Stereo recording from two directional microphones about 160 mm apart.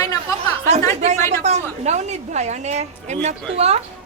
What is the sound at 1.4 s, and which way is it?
A woman's voice, 45° right (ahead or behind).